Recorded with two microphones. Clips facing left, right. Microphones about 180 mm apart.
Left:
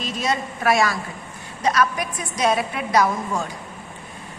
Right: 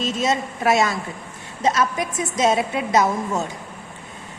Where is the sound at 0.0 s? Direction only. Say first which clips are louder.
Right 3 dB; 25° right (ahead or behind).